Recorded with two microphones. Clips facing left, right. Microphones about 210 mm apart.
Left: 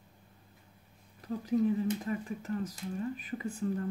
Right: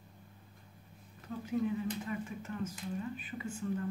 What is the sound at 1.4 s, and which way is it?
Speech, 35° left (ahead or behind).